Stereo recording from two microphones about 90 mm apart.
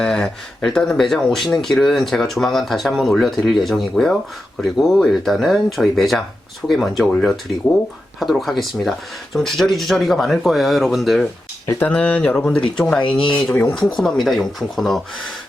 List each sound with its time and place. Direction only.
0.0 s speech: 5° left (ahead or behind)
11.8 s speech: 15° left (ahead or behind)
13.1 s speech: 65° left (ahead or behind)
13.3 s speech: 10° left (ahead or behind)